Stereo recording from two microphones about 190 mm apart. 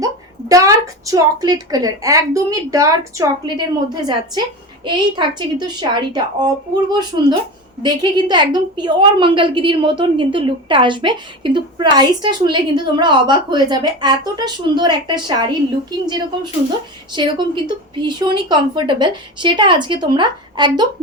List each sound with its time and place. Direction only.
0.0 s a woman's voice: 15° right (ahead or behind)